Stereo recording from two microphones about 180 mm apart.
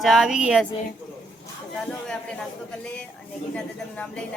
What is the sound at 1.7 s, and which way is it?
Speech, 5° left (ahead or behind).